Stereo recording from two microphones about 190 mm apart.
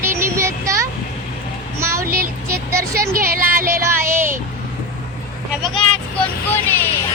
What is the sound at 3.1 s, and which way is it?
Music, 50° right (ahead or behind).